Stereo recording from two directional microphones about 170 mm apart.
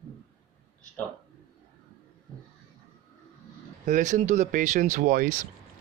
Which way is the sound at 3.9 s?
45° right (ahead or behind).